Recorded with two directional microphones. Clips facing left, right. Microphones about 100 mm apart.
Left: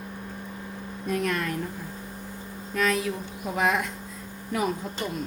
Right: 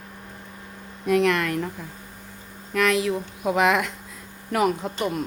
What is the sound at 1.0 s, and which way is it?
Speech, 80° right.